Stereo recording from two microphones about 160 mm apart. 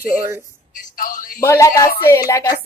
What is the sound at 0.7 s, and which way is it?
Speech, 60° left (ahead or behind).